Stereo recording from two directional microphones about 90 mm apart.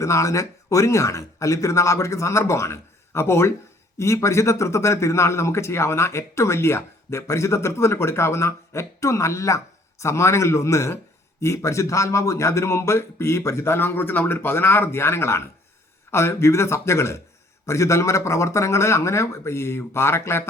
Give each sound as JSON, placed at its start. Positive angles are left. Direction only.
{"t": 0.0, "sound": "a man's voice", "side_deg": 35}